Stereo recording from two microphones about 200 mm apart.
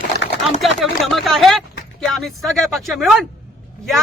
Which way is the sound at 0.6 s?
Centre (ahead or behind).